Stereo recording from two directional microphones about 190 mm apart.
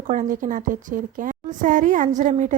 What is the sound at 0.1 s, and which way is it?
A woman's voice, 45° right (ahead or behind).